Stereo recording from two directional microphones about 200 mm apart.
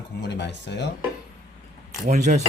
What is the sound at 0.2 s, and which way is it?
Speech, 60° left (ahead or behind).